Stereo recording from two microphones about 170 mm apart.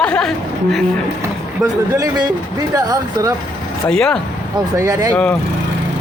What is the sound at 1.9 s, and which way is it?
Speech, 20° right (ahead or behind).